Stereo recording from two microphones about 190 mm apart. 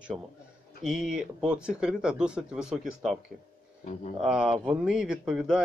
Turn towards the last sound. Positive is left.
turn(degrees=0)  # may be behind; listen again after turning